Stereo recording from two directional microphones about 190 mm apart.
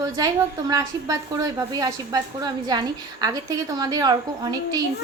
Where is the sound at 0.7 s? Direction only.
20° right (ahead or behind).